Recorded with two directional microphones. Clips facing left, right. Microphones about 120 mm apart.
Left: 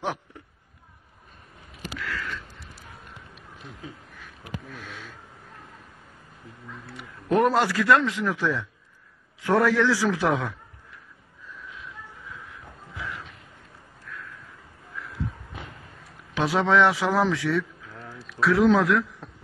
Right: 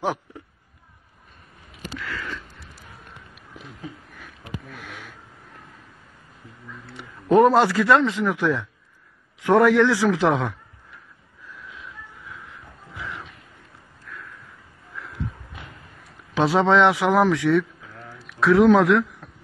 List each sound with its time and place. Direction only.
4.7 s sniff: 15° right (ahead or behind)
7.3 s a man's voice: 25° right (ahead or behind)
12.4 s a sound: 20° right (ahead or behind)
16.3 s a man's voice: 25° right (ahead or behind)
18.8 s a man's voice: 90° right